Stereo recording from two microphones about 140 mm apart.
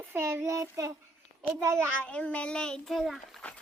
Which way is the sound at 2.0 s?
10° left (ahead or behind).